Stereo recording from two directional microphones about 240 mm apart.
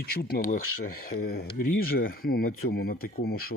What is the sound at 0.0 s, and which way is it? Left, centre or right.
Speech, left.